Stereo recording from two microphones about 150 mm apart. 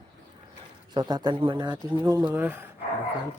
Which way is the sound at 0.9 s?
30° right (ahead or behind).